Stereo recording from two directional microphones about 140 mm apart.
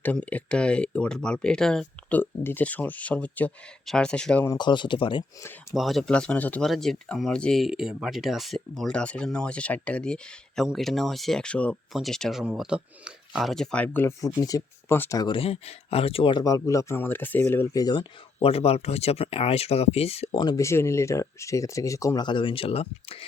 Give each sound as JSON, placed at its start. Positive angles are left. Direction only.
{"t": 0.0, "sound": "speech", "side_deg": 10}
{"t": 4.4, "sound": "speech", "side_deg": 30}
{"t": 5.7, "sound": "speech", "side_deg": 0}
{"t": 14.3, "sound": "speech", "side_deg": 25}
{"t": 15.2, "sound": "speech", "side_deg": 40}
{"t": 16.4, "sound": "speech", "side_deg": 25}
{"t": 17.7, "sound": "speech", "side_deg": 30}
{"t": 18.3, "sound": "speech", "side_deg": 45}
{"t": 20.4, "sound": "speech", "side_deg": 25}